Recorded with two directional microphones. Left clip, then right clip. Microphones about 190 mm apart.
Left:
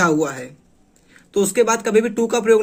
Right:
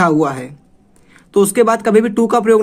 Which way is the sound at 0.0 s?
30° right (ahead or behind).